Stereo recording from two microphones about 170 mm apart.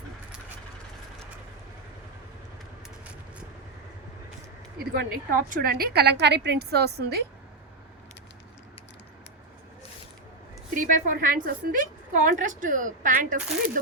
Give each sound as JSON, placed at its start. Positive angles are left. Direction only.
{"t": 4.8, "sound": "a woman's voice", "side_deg": -60}
{"t": 10.8, "sound": "a woman's voice", "side_deg": -50}